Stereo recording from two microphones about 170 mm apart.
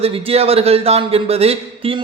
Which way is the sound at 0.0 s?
35° right (ahead or behind).